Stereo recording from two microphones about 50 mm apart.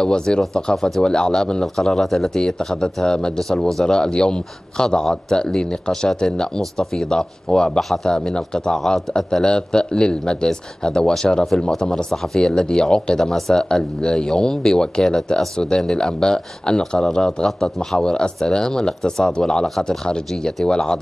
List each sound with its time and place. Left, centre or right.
0.0 s speech: centre